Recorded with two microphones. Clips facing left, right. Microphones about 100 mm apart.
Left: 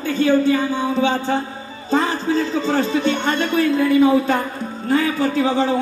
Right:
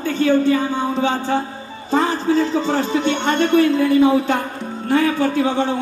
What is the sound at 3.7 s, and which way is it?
Speech, 30° right (ahead or behind).